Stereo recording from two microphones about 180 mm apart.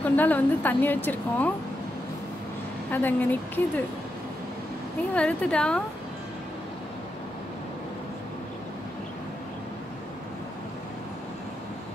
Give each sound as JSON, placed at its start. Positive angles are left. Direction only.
{"t": 0.0, "sound": "a woman's voice", "side_deg": 10}
{"t": 2.9, "sound": "a woman's voice", "side_deg": 10}
{"t": 5.1, "sound": "a woman's voice", "side_deg": 5}